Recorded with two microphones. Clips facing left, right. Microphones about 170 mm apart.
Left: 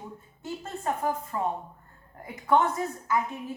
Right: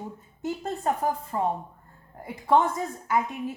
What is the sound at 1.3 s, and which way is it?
Speech, 25° right (ahead or behind).